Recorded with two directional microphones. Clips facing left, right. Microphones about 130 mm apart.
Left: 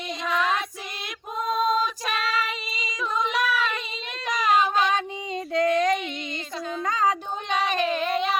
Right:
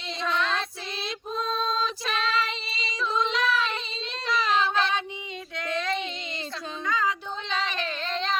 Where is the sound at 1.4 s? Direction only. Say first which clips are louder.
Left 6 dB; 15° left (ahead or behind).